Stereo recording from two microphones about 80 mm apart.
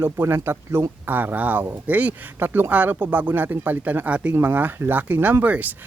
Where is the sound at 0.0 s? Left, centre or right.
Right.